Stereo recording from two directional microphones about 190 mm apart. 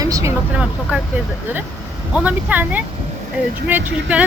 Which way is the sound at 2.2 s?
10° right (ahead or behind).